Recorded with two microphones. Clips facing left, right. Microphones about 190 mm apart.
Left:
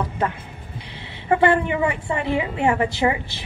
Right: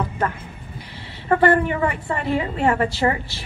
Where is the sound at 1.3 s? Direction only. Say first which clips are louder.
Right 1 dB; 15° left (ahead or behind).